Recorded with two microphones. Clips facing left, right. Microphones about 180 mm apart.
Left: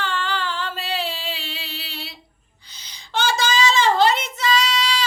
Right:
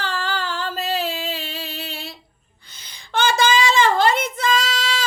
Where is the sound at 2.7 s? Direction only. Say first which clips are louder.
Even; 50° right (ahead or behind).